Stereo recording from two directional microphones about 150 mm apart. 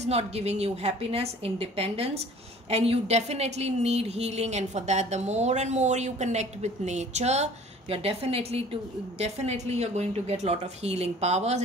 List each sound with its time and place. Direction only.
0.0 s a woman's voice: 45° right (ahead or behind)